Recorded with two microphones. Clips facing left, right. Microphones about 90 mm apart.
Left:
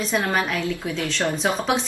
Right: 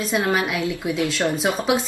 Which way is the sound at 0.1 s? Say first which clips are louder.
Right 2 dB; 10° right (ahead or behind).